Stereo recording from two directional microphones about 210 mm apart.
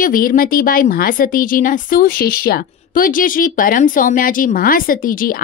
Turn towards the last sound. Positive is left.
turn(degrees=45)  # may be behind; listen again after turning